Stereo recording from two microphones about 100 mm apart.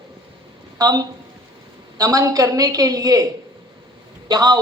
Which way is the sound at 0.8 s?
40° right (ahead or behind).